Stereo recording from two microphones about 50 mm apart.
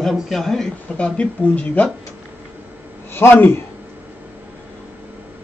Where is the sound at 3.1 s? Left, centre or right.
Left.